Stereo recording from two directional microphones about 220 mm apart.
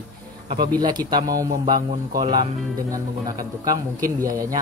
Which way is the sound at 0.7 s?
20° right (ahead or behind).